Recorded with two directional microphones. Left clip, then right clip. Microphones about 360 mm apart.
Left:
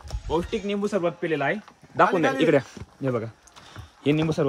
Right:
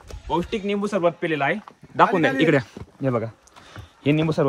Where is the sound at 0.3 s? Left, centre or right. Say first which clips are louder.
Right 2 dB; centre.